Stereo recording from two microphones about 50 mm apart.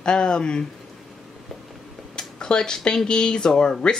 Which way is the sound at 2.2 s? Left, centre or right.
Centre.